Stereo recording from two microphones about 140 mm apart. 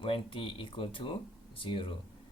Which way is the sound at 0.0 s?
40° left (ahead or behind).